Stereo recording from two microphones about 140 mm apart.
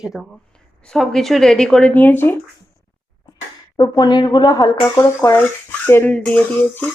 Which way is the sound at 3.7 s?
30° left (ahead or behind).